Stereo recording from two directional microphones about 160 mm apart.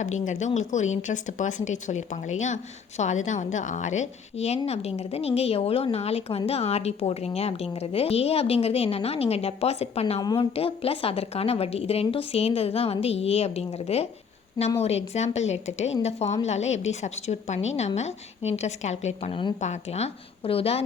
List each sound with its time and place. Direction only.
0.0 s a woman's voice: 50° left (ahead or behind)